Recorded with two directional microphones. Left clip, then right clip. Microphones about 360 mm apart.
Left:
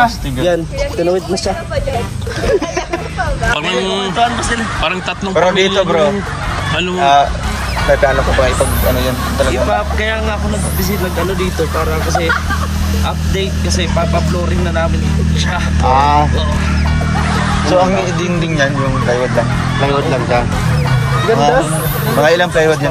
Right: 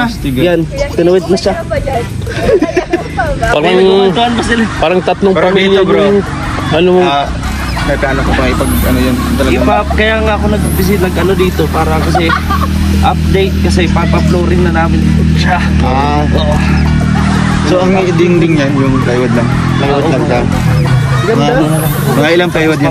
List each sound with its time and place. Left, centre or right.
3.5 s speech: centre
5.3 s a man's voice: left
15.9 s a man's voice: left
19.9 s a man's voice: left
22.2 s speech: centre